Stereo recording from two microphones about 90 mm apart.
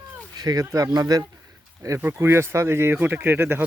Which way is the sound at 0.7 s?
30° right (ahead or behind).